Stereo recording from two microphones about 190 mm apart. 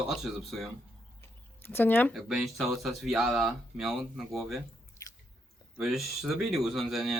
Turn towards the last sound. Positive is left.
turn(degrees=0)  # may be behind; listen again after turning